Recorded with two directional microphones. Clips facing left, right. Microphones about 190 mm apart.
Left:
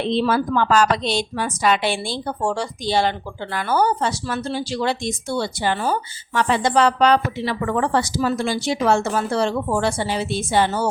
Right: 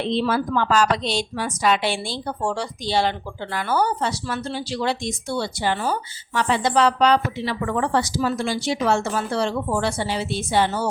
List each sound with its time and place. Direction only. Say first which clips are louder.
0.1 s speech: left 2 dB; 55° left (ahead or behind)